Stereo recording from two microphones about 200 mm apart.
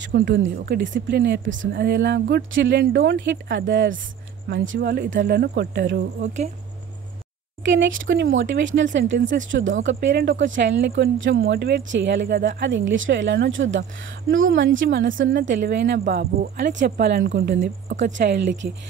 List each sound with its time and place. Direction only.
0.0 s speech: 55° right (ahead or behind)
6.2 s speech: 35° right (ahead or behind)
7.6 s speech: 65° right (ahead or behind)
9.9 s speech: 55° right (ahead or behind)
15.4 s speech: 40° right (ahead or behind)
15.7 s speech: 60° right (ahead or behind)